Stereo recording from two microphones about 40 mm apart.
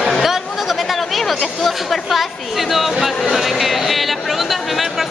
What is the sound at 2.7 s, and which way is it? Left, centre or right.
Music, centre.